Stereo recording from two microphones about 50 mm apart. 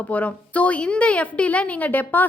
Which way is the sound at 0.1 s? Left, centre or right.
Left.